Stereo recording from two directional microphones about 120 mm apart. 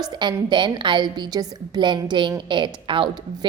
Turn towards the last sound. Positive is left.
turn(degrees=-45)  # may be behind; listen again after turning